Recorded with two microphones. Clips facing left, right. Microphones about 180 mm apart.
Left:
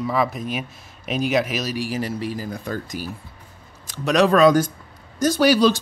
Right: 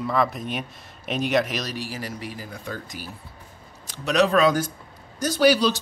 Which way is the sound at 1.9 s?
30° left (ahead or behind).